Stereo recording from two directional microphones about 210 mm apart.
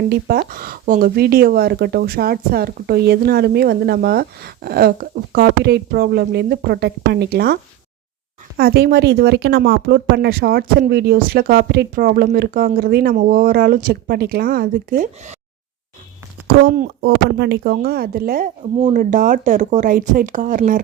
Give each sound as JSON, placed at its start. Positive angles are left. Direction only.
{"t": 0.1, "sound": "speech", "side_deg": -45}
{"t": 16.5, "sound": "speech", "side_deg": -45}